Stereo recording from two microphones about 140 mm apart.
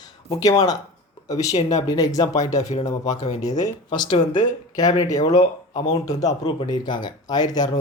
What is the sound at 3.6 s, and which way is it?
Speech, 30° left (ahead or behind).